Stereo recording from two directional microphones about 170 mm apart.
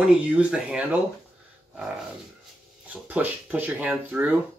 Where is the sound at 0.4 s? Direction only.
5° right (ahead or behind).